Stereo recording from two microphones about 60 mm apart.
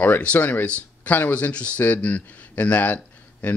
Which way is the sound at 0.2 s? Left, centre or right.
Left.